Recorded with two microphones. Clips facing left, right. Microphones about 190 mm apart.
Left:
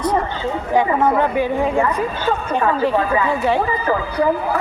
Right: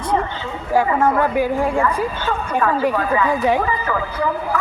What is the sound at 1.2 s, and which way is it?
Speech, 10° right (ahead or behind).